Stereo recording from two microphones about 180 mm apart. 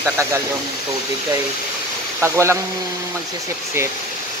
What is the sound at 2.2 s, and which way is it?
Speech, 15° right (ahead or behind).